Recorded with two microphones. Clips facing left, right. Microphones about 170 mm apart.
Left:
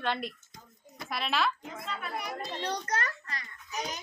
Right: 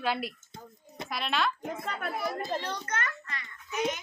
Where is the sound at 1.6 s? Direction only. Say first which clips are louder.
Right 4 dB; 50° right (ahead or behind).